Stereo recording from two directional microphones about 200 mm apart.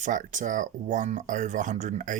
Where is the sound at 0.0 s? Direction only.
40° right (ahead or behind).